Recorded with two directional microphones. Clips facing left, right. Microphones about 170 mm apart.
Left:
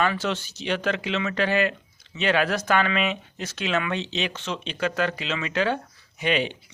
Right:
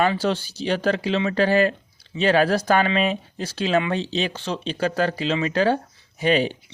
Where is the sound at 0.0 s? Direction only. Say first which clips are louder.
Right 4 dB; 35° right (ahead or behind).